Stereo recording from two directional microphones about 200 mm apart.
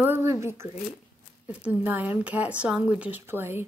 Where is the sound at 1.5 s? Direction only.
5° right (ahead or behind).